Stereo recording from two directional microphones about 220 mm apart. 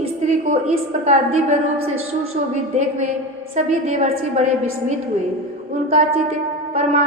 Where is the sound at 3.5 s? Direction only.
30° right (ahead or behind).